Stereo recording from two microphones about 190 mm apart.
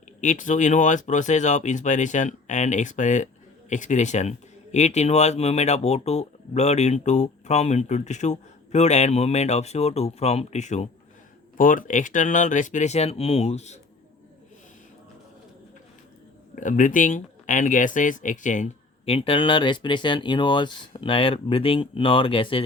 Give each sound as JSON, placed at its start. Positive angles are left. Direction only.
{"t": 0.2, "sound": "speech", "side_deg": 40}
{"t": 16.6, "sound": "speech", "side_deg": 40}